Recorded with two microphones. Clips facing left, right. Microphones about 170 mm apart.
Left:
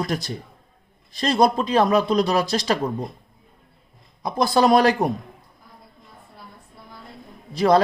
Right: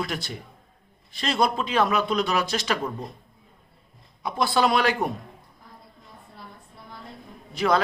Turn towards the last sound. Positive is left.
turn(degrees=35)  # may be behind; listen again after turning